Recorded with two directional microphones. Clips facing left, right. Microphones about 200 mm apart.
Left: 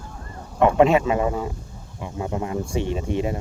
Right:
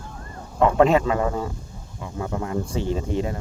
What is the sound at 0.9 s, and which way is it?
Speech, 20° left (ahead or behind).